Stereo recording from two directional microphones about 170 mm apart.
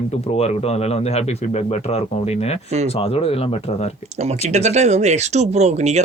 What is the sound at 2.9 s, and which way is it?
Speech, 35° left (ahead or behind).